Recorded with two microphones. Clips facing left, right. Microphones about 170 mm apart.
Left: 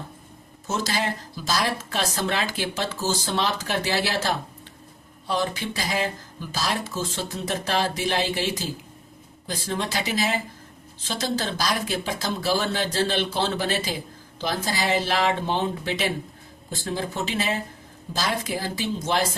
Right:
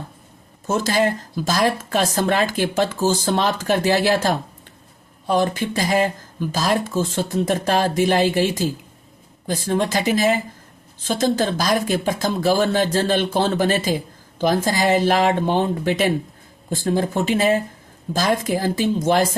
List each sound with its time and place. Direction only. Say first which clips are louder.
0.7 s speech: right 7 dB; 50° right (ahead or behind)
9.5 s speech: right 8 dB; 50° right (ahead or behind)